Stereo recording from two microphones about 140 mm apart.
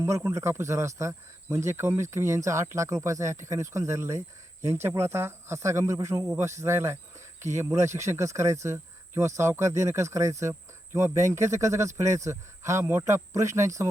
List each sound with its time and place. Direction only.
0.0 s speech: 20° right (ahead or behind)